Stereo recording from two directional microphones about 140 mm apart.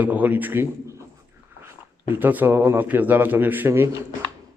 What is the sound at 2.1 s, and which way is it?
A man's voice, 15° right (ahead or behind).